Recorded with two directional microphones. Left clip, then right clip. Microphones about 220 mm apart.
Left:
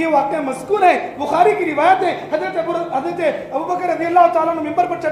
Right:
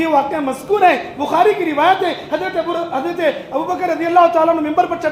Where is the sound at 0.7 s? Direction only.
45° right (ahead or behind).